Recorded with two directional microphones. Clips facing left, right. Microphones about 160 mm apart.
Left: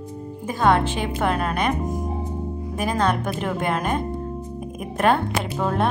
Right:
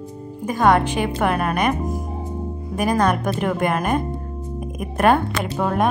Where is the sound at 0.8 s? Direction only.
15° right (ahead or behind).